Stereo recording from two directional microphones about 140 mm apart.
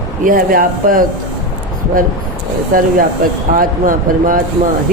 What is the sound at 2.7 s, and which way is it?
Speech, 85° right.